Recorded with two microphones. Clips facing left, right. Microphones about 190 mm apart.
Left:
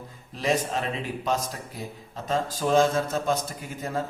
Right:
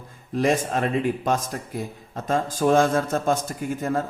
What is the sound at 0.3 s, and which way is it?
A man's voice, 50° right (ahead or behind).